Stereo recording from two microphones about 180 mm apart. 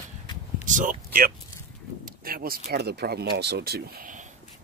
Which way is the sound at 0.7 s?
45° right (ahead or behind).